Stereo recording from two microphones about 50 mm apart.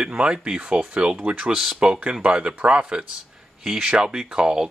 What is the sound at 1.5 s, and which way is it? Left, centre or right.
Speech, centre.